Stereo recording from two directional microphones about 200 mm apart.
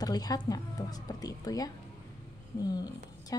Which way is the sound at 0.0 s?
20° left (ahead or behind).